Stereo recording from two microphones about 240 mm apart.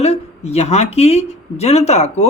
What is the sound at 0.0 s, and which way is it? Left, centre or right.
Speech, left.